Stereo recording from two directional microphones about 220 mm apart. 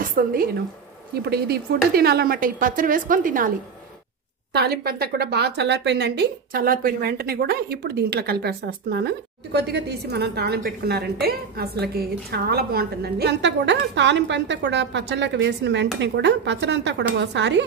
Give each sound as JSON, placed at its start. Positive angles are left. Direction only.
{"t": 0.0, "sound": "a woman's voice", "side_deg": -40}